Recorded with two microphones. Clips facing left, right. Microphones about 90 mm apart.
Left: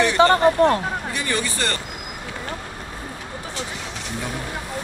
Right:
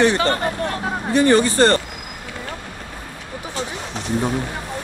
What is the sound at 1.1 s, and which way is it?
Speech, 35° right (ahead or behind).